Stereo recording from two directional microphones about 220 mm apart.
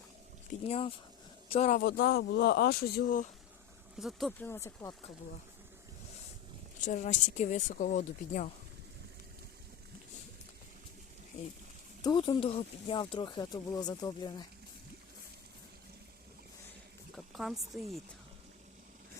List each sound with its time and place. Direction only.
0.6 s speech: 25° left (ahead or behind)
1.8 s speech: 45° left (ahead or behind)
4.0 s speech: centre (ahead or behind)
6.8 s speech: 35° left (ahead or behind)
12.0 s speech: 20° left (ahead or behind)
17.2 s speech: centre (ahead or behind)